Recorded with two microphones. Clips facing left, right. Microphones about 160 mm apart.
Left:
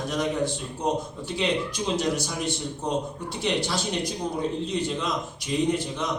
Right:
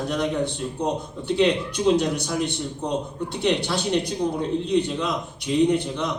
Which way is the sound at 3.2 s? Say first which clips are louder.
Right 6 dB; 60° right (ahead or behind).